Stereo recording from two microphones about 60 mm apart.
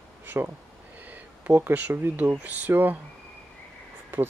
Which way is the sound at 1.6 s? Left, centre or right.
Right.